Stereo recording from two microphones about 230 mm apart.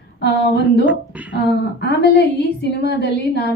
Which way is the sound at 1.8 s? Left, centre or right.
Left.